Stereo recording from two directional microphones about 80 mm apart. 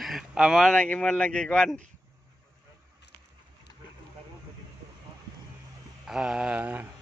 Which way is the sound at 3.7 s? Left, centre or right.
Left.